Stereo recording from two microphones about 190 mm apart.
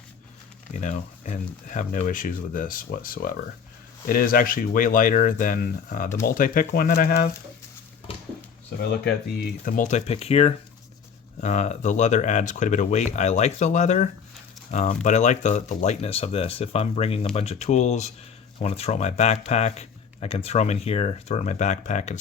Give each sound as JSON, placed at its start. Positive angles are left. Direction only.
{"t": 0.7, "sound": "speech", "side_deg": 40}
{"t": 8.8, "sound": "speech", "side_deg": 55}